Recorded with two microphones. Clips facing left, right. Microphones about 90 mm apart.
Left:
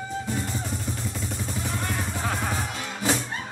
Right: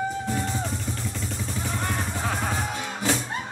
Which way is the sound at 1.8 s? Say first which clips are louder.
Right 1 dB; 20° right (ahead or behind).